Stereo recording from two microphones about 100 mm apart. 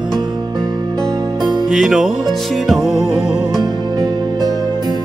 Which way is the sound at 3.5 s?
45° right (ahead or behind).